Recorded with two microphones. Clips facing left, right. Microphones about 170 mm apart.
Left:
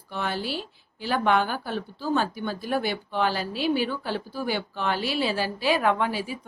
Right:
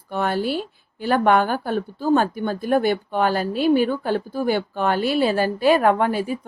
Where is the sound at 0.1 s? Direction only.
50° right (ahead or behind).